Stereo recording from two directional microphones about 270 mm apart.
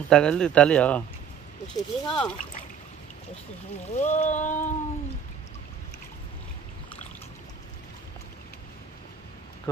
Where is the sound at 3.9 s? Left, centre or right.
Left.